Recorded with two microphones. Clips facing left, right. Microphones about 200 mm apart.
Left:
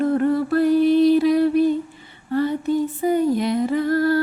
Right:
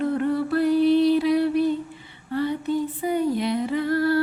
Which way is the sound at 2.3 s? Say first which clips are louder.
Left 4 dB; 45° left (ahead or behind).